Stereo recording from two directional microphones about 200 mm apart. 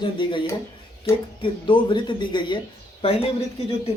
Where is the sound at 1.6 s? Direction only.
25° left (ahead or behind).